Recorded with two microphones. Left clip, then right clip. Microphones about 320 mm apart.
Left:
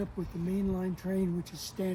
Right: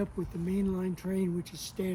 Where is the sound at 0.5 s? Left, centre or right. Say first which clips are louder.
Right 1 dB; centre.